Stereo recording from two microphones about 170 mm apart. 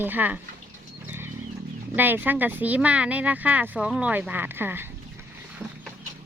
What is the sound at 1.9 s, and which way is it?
Speech, 10° right (ahead or behind).